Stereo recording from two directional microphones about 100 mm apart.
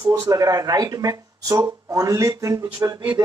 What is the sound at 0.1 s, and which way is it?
A man's voice, 35° right (ahead or behind).